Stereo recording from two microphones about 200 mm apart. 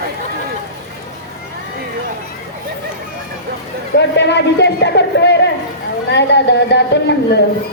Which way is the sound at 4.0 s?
60° left (ahead or behind).